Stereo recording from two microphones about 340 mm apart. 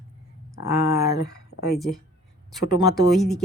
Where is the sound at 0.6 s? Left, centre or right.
Left.